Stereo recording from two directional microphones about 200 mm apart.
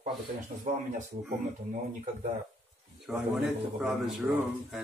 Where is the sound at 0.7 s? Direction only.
40° right (ahead or behind).